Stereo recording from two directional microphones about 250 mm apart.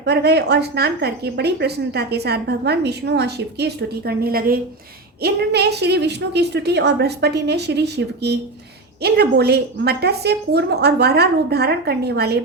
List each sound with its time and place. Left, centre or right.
0.0 s speech: right